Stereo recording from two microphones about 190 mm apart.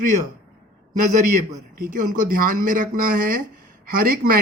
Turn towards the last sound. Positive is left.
turn(degrees=-50)  # may be behind; listen again after turning